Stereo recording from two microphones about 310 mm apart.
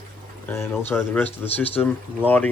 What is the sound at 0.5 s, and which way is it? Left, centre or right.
Speech, centre.